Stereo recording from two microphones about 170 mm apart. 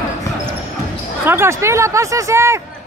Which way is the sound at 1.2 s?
15° right (ahead or behind).